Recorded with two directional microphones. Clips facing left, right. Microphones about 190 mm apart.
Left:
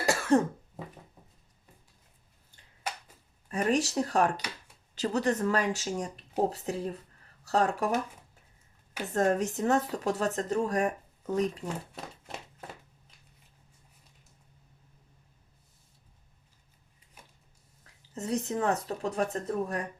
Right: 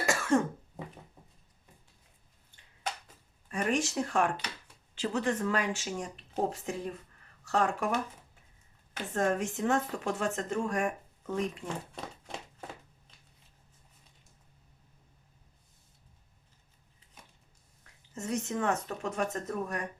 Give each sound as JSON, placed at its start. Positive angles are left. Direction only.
{"t": 0.0, "sound": "cough", "side_deg": 35}
{"t": 3.5, "sound": "speech", "side_deg": 35}
{"t": 9.1, "sound": "speech", "side_deg": 40}
{"t": 18.1, "sound": "speech", "side_deg": 35}